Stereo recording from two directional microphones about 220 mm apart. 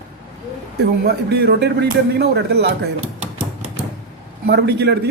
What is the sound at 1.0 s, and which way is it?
A man's voice, 50° right (ahead or behind).